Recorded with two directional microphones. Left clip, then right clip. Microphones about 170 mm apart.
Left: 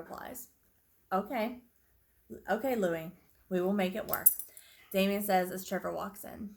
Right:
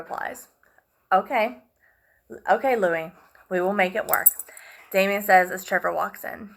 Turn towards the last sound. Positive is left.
turn(degrees=40)  # may be behind; listen again after turning